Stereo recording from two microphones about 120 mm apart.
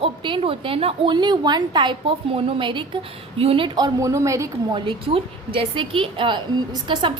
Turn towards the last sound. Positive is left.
turn(degrees=-40)  # may be behind; listen again after turning